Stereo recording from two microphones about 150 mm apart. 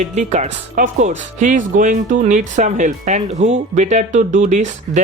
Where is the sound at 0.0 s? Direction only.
50° right (ahead or behind).